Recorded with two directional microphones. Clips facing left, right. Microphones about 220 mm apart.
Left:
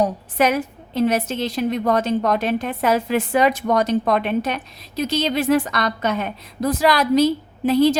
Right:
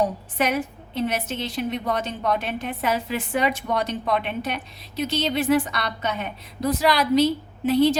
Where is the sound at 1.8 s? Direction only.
45° left (ahead or behind).